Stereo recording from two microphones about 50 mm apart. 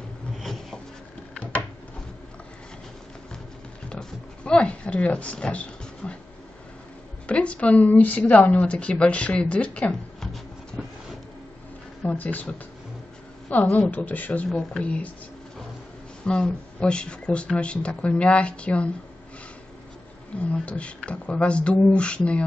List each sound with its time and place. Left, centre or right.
0.4 s rub: centre
3.9 s a sound: centre
7.2 s a woman's voice: left
10.2 s a sound: centre
12.0 s speech: left
13.5 s a woman's voice: left
16.3 s a woman's voice: centre
20.5 s a woman's voice: left